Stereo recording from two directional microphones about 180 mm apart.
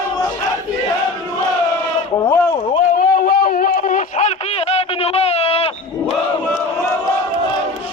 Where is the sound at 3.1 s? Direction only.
55° left (ahead or behind); by 6.1 s 35° left (ahead or behind).